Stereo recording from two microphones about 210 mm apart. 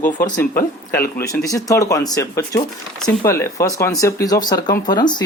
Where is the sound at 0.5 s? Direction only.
10° left (ahead or behind).